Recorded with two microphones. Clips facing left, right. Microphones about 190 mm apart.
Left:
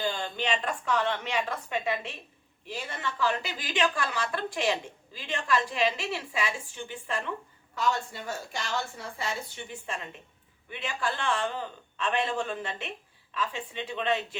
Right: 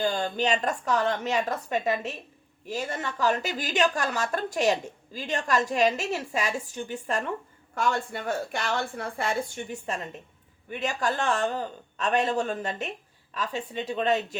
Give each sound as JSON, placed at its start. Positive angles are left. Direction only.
{"t": 0.0, "sound": "a man's voice", "side_deg": -45}
{"t": 7.8, "sound": "a woman's voice", "side_deg": -55}